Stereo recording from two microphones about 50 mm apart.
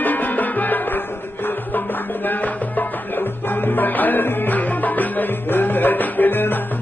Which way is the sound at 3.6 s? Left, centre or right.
Left.